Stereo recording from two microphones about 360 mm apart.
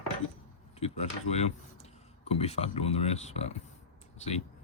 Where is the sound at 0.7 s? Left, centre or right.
Centre.